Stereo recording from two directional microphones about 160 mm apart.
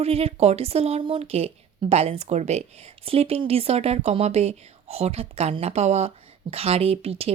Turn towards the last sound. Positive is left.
turn(degrees=-40)  # may be behind; listen again after turning